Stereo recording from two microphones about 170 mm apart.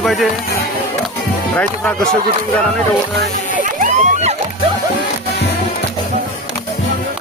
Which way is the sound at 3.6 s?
50° right (ahead or behind).